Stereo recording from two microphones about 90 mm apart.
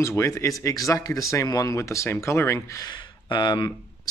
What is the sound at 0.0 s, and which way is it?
Speech, 35° left (ahead or behind).